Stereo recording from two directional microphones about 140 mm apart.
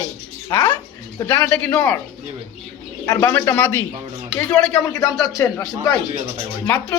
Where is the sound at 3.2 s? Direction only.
15° left (ahead or behind).